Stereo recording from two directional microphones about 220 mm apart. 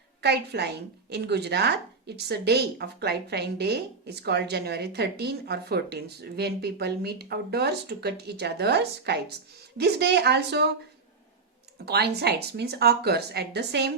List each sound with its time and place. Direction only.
0.2 s speech: 50° right (ahead or behind)
11.9 s speech: 45° right (ahead or behind)